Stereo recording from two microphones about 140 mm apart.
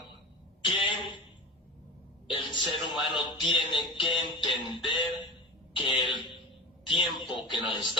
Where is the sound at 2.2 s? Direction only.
35° left (ahead or behind).